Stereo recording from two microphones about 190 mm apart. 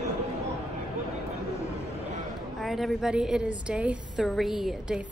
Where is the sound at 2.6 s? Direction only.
Centre (ahead or behind).